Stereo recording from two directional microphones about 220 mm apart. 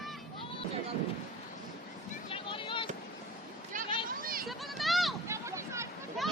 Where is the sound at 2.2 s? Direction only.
25° left (ahead or behind).